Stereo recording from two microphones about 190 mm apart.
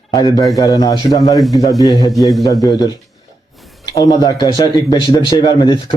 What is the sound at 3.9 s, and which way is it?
Speech, 20° left (ahead or behind).